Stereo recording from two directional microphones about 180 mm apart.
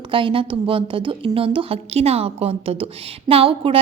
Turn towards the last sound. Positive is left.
turn(degrees=-30)  # may be behind; listen again after turning